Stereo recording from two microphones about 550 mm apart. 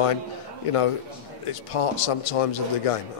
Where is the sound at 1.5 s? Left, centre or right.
Left.